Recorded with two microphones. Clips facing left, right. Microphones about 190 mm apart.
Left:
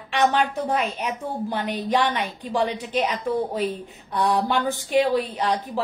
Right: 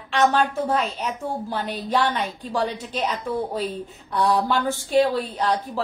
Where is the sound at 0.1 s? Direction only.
15° left (ahead or behind).